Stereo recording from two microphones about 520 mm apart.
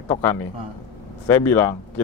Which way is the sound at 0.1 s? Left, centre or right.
Centre.